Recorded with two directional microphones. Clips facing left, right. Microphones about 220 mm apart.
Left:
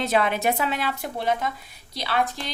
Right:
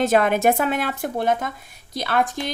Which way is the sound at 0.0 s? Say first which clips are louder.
Right 5 dB; 45° right (ahead or behind).